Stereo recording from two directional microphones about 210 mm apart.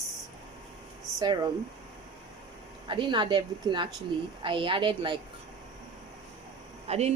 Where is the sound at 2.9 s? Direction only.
20° right (ahead or behind).